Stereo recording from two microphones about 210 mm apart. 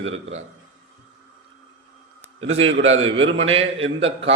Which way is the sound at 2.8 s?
30° right (ahead or behind).